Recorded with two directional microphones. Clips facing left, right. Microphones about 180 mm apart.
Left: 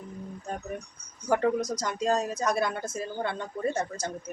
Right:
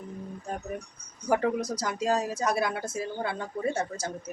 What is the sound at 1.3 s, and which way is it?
Speech, 5° right (ahead or behind).